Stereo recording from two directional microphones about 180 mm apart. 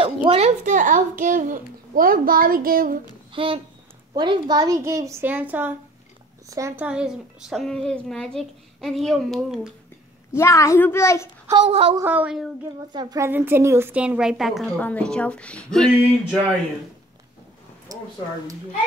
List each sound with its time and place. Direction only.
0.0 s a woman's voice: 30° right (ahead or behind)
0.7 s a child's voice: 45° right (ahead or behind)
3.3 s a child's voice: 30° right (ahead or behind)
6.9 s a woman's voice: 5° right (ahead or behind)
10.3 s speech: 15° left (ahead or behind)
11.6 s a woman's voice: 35° right (ahead or behind)
12.0 s a woman's voice: 10° right (ahead or behind)
12.9 s a woman's voice: 20° right (ahead or behind); by 16.3 s 5° left (ahead or behind)
17.9 s a sound: 20° right (ahead or behind)